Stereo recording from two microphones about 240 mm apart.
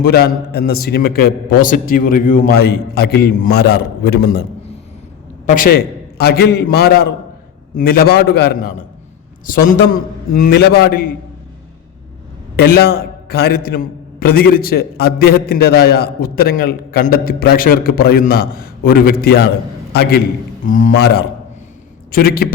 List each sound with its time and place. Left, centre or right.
0.0 s a man's voice: left
5.5 s a man's voice: left
12.5 s a man's voice: left